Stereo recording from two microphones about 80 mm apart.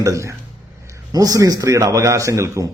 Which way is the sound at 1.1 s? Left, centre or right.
Right.